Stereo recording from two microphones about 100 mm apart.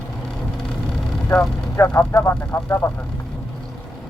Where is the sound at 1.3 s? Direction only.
25° left (ahead or behind).